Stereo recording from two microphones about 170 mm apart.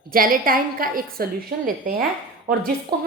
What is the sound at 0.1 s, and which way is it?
A woman's voice, 55° right (ahead or behind).